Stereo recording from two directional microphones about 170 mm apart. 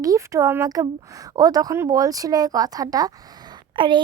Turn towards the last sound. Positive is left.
turn(degrees=-30)  # may be behind; listen again after turning